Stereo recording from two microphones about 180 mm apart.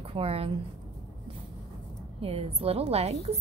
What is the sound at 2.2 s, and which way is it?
A woman's voice, 35° right (ahead or behind).